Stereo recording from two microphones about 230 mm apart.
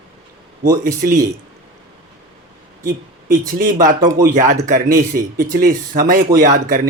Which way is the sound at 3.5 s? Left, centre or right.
Right.